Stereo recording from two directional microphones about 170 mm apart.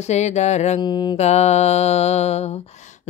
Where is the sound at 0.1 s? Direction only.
40° left (ahead or behind).